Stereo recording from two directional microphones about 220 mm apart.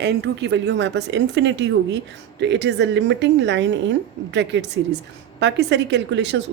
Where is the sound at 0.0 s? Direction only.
50° right (ahead or behind).